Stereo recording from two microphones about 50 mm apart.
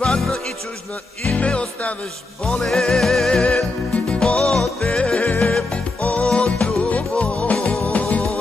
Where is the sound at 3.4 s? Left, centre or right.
Centre.